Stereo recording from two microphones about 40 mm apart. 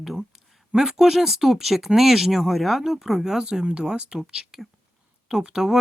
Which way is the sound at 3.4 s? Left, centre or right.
Right.